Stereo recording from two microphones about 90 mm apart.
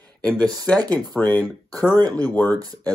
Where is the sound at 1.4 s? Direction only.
40° right (ahead or behind).